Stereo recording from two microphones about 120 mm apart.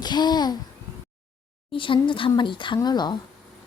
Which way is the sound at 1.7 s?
45° left (ahead or behind).